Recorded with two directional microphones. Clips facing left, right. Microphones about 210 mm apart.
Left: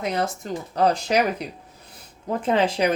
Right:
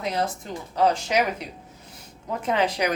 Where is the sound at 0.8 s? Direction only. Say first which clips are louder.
Left 1 dB; 35° left (ahead or behind).